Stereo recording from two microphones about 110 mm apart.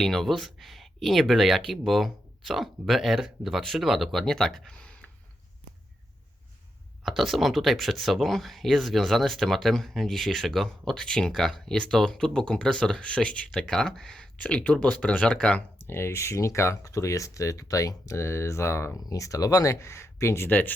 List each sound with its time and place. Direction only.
0.0 s speech: 5° left (ahead or behind)
7.0 s speech: centre (ahead or behind)
15.9 s speech: 25° left (ahead or behind)